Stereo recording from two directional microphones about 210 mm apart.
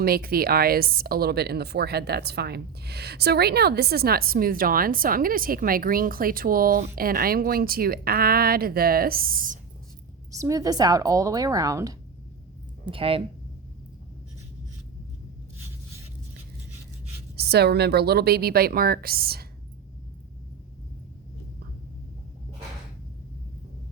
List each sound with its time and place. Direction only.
0.0 s speech: 45° right (ahead or behind)
10.3 s speech: 15° right (ahead or behind)
17.3 s speech: 50° right (ahead or behind)